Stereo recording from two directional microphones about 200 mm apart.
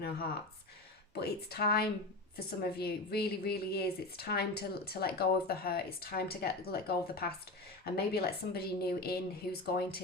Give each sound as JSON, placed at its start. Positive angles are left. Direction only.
{"t": 1.1, "sound": "a woman's voice", "side_deg": 50}